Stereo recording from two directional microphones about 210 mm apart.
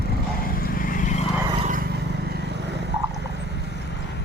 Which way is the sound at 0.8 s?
40° left (ahead or behind).